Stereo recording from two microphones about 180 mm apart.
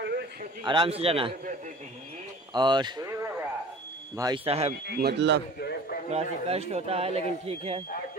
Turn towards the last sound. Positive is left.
turn(degrees=-35)  # may be behind; listen again after turning